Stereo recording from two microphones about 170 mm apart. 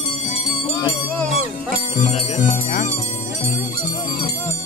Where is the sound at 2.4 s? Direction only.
50° left (ahead or behind).